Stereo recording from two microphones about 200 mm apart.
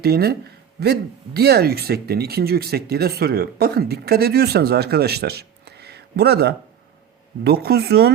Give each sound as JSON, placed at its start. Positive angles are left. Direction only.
{"t": 0.0, "sound": "speech", "side_deg": -50}